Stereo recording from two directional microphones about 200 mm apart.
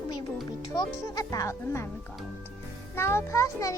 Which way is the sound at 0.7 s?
15° left (ahead or behind).